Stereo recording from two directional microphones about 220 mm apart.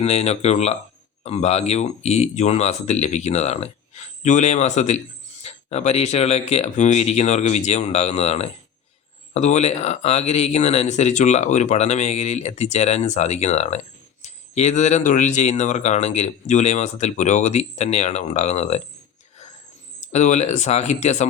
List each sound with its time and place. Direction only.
0.0 s speech: 30° left (ahead or behind)
20.1 s speech: 30° left (ahead or behind)